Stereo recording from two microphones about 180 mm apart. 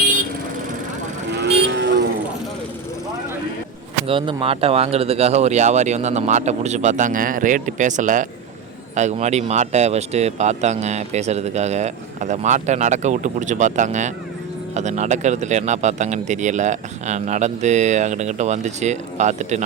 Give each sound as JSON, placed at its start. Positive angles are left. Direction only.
{"t": 1.5, "sound": "vehicle", "side_deg": -75}
{"t": 4.0, "sound": "speech", "side_deg": -30}